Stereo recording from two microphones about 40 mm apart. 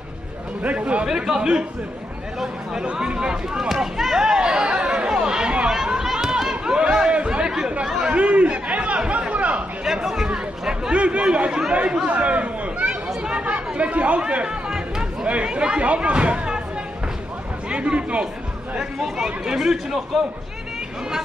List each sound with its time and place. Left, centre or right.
0.6 s speech: right
1.0 s speech: centre
2.8 s speech: right
3.6 s chatter: centre
6.1 s run: centre
7.2 s chatter: right
8.1 s a sound: right
10.7 s speech: right
13.1 s chatter: right
15.4 s speech: right
17.6 s speech: right
18.8 s speech: centre